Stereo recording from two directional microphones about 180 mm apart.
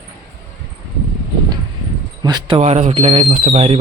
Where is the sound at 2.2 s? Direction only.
20° right (ahead or behind).